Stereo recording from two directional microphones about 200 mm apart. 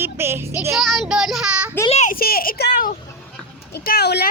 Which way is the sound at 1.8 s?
35° left (ahead or behind).